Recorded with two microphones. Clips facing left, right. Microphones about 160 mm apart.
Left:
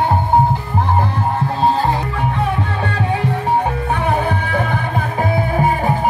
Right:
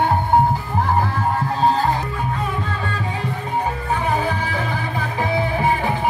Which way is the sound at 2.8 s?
65° left (ahead or behind).